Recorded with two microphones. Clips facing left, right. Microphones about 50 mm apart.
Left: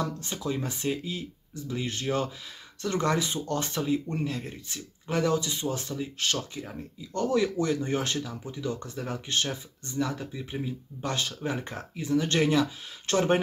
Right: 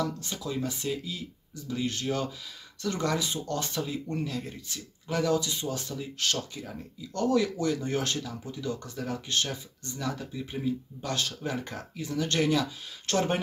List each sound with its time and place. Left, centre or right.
0.0 s speech: left
3.8 s speech: centre
4.3 s speech: left; by 10.7 s centre
11.0 s speech: left